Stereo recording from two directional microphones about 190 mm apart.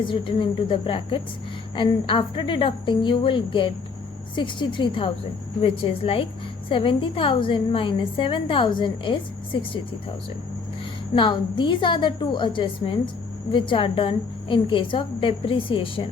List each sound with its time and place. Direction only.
0.0 s a woman's voice: 25° left (ahead or behind)
11.1 s a woman's voice: 25° left (ahead or behind)